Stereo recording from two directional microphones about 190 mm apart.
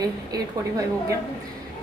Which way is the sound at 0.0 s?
20° right (ahead or behind).